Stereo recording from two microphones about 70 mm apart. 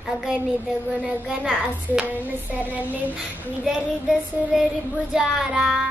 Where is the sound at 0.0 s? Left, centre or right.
Centre.